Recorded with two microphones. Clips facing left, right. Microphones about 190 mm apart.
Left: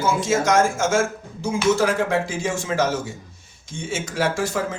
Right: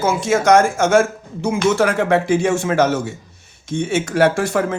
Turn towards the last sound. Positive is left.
turn(degrees=-65)  # may be behind; listen again after turning